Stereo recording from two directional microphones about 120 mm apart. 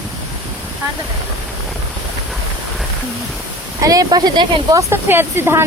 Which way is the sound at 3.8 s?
30° right (ahead or behind).